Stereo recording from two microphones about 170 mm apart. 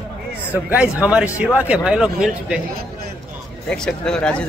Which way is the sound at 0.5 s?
10° right (ahead or behind).